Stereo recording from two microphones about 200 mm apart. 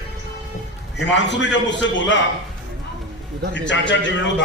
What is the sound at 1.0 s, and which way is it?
A man's voice, 60° left (ahead or behind).